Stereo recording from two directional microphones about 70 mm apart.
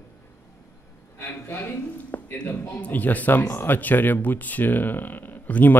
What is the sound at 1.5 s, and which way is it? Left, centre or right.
Speech, left.